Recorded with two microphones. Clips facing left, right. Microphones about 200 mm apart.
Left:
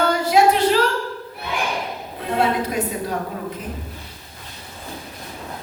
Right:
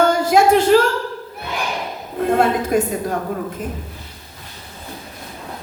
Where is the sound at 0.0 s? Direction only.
50° right (ahead or behind).